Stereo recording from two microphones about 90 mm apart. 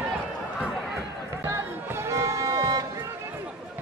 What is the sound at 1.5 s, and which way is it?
Music, 30° right (ahead or behind).